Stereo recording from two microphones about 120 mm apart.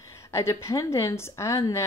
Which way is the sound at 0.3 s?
25° left (ahead or behind).